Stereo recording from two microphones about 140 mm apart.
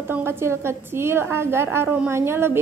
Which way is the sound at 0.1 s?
15° right (ahead or behind).